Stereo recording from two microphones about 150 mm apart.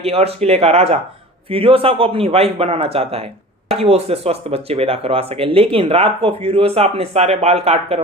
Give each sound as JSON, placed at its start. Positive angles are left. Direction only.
{"t": 0.0, "sound": "speech", "side_deg": -40}